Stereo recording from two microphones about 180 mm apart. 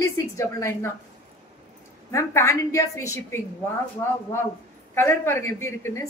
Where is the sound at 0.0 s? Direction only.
15° left (ahead or behind).